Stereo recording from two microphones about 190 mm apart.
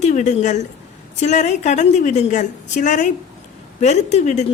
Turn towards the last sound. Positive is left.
turn(degrees=40)  # may be behind; listen again after turning